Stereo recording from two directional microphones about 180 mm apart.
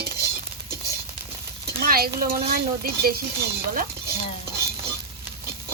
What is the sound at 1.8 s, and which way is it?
Speech, 55° right (ahead or behind).